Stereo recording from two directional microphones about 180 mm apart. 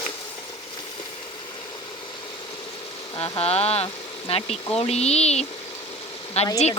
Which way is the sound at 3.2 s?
35° left (ahead or behind).